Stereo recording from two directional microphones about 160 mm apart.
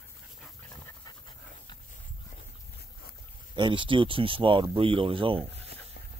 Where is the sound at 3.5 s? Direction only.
30° right (ahead or behind).